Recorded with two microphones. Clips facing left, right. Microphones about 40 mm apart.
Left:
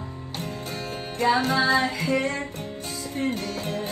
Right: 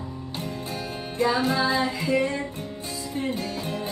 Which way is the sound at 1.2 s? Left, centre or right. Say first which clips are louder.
Left 1 dB; left.